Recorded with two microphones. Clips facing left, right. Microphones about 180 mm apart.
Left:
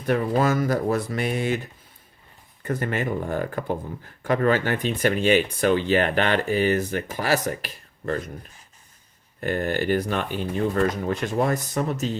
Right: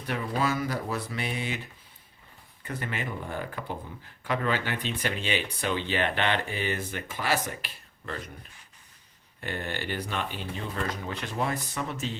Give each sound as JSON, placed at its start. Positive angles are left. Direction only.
{"t": 0.0, "sound": "speech", "side_deg": 45}
{"t": 2.6, "sound": "speech", "side_deg": 45}